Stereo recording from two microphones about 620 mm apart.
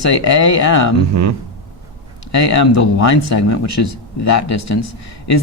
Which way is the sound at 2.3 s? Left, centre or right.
Left.